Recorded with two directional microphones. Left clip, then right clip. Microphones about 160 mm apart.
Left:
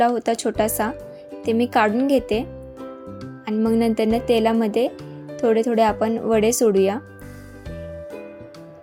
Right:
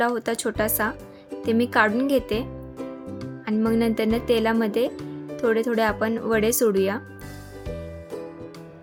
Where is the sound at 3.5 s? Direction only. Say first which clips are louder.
Left 3 dB; 15° left (ahead or behind).